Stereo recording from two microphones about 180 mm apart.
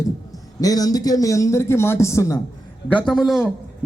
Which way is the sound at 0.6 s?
20° left (ahead or behind).